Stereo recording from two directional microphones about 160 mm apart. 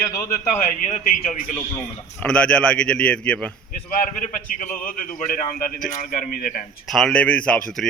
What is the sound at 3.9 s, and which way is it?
A man's voice, 55° left (ahead or behind).